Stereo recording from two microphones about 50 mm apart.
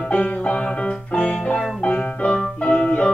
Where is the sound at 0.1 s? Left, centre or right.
Left.